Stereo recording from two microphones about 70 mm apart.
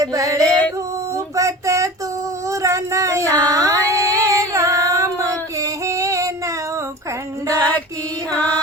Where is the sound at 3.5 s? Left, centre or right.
Right.